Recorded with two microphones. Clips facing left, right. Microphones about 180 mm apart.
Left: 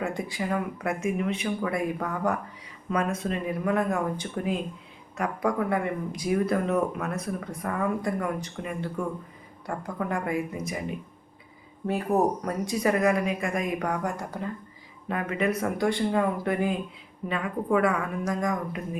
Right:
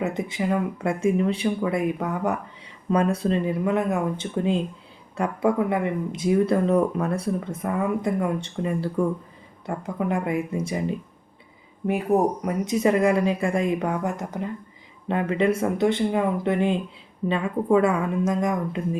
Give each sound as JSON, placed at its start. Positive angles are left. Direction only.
{"t": 0.0, "sound": "speech", "side_deg": -20}
{"t": 2.9, "sound": "speech", "side_deg": -30}
{"t": 9.6, "sound": "speech", "side_deg": -20}
{"t": 11.9, "sound": "speech", "side_deg": -15}